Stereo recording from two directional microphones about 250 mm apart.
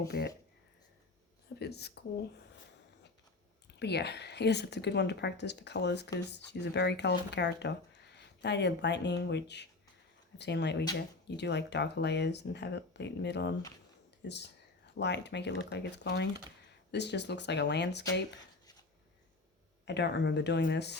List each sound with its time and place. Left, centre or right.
0.1 s speech: left
1.5 s speech: left
3.7 s speech: left
18.6 s a sound: centre
19.8 s speech: left